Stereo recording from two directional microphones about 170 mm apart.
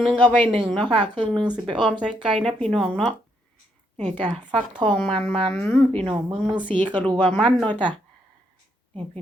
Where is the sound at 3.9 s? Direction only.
10° left (ahead or behind).